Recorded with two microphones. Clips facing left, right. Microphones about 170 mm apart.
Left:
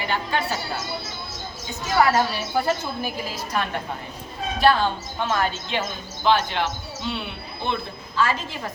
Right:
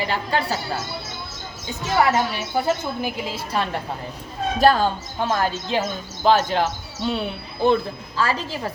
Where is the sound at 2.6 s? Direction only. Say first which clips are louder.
Right 2 dB; 20° right (ahead or behind).